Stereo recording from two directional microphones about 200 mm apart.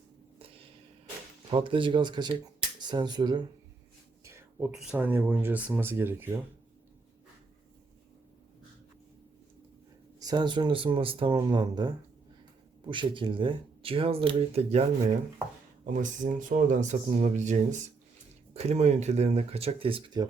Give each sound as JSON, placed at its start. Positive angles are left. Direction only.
{"t": 0.3, "sound": "a sound", "side_deg": -30}
{"t": 1.5, "sound": "speech", "side_deg": -25}
{"t": 4.7, "sound": "speech", "side_deg": -5}
{"t": 10.2, "sound": "speech", "side_deg": -20}
{"t": 15.9, "sound": "speech", "side_deg": -40}